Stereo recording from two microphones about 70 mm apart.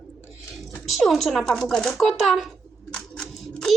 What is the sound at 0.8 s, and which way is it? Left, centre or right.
Speech, centre.